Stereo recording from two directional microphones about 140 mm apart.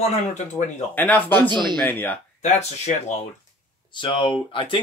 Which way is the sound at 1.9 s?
15° left (ahead or behind).